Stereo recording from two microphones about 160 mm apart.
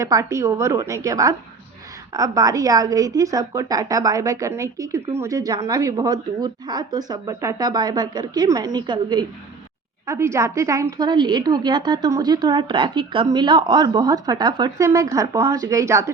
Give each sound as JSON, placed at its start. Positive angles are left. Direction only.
{"t": 0.0, "sound": "a woman's voice", "side_deg": -20}
{"t": 10.1, "sound": "a woman's voice", "side_deg": -15}